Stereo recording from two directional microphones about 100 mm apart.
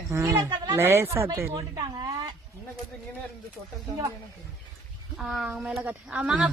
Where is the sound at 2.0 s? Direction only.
40° right (ahead or behind).